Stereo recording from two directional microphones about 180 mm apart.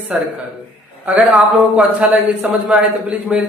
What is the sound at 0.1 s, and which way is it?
Speech, 5° right (ahead or behind).